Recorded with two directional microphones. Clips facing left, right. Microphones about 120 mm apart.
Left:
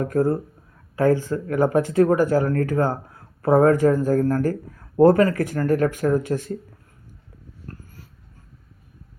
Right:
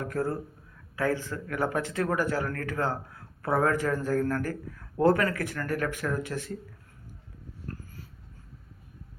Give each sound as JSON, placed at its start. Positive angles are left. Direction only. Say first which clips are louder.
{"t": 0.0, "sound": "speech", "louder": "left 9 dB", "side_deg": 40}